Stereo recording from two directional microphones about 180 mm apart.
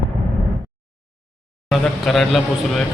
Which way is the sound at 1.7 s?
Centre (ahead or behind).